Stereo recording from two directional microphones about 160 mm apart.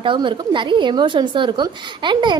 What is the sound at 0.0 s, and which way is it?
A woman's voice, 30° right (ahead or behind).